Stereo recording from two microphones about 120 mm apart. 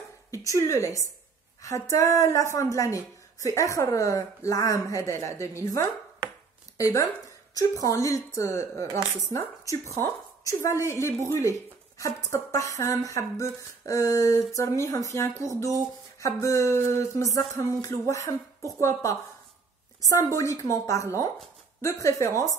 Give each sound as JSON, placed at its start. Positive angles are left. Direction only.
{"t": 0.3, "sound": "a woman's voice", "side_deg": 25}